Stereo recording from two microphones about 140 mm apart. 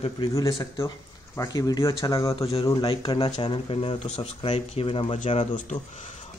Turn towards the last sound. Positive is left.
turn(degrees=55)  # may be behind; listen again after turning